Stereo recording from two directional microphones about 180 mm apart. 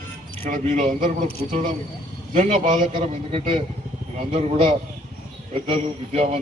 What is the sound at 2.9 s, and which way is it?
A man's voice, 30° right (ahead or behind).